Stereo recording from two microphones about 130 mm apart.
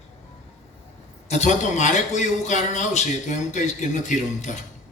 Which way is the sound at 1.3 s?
60° left (ahead or behind).